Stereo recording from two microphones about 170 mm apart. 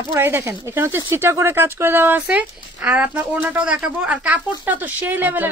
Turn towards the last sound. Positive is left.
turn(degrees=-10)  # may be behind; listen again after turning